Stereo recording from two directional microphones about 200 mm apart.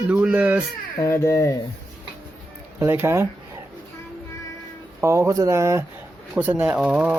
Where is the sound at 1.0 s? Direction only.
15° left (ahead or behind).